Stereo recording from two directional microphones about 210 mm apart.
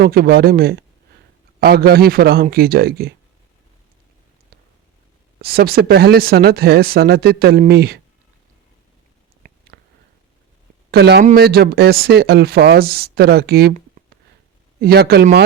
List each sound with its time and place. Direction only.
0.0 s speech: 45° right (ahead or behind)
5.4 s speech: 45° right (ahead or behind)
9.4 s a sound: 40° right (ahead or behind)
10.9 s speech: 50° right (ahead or behind)
14.8 s speech: 50° right (ahead or behind)